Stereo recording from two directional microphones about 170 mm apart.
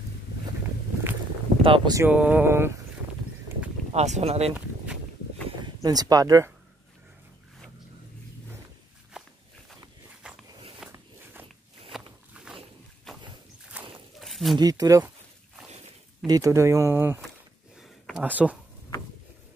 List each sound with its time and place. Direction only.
1.6 s speech: 30° right (ahead or behind)
2.0 s speech: 10° right (ahead or behind)
3.9 s speech: 40° right (ahead or behind)
5.8 s speech: 20° right (ahead or behind)
9.1 s walk: 5° right (ahead or behind)
10.2 s a sound: 5° right (ahead or behind)
10.9 s walk: 15° right (ahead or behind)
13.1 s a sound: centre (ahead or behind)
13.7 s walk: 10° right (ahead or behind)
14.2 s a sound: centre (ahead or behind)
14.6 s speech: 20° right (ahead or behind)
16.3 s speech: 20° right (ahead or behind)
17.7 s a sound: centre (ahead or behind)
18.2 s speech: 10° right (ahead or behind)